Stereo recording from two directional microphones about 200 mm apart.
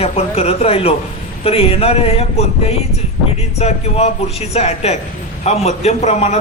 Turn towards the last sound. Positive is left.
turn(degrees=35)  # may be behind; listen again after turning